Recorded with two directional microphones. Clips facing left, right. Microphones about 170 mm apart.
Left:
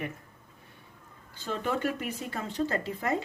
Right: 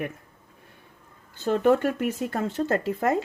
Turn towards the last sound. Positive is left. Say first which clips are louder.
# right 6 dB
turn(degrees=-50)  # may be behind; listen again after turning